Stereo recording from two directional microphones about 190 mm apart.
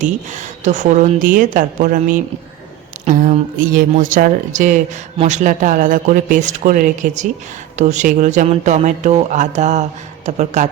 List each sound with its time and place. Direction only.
0.0 s a woman's voice: 40° right (ahead or behind)